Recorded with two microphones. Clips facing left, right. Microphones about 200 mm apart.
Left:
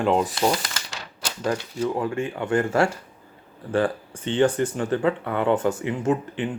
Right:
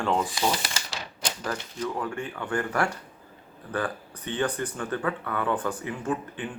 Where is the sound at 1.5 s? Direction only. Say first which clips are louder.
Left 8 dB; 25° left (ahead or behind).